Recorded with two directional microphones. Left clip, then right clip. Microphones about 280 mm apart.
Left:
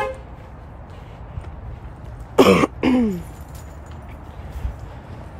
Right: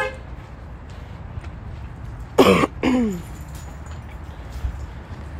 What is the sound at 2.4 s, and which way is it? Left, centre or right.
Throat clearing, centre.